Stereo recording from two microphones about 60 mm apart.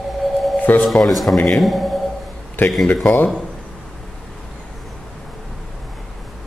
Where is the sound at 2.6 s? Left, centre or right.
Left.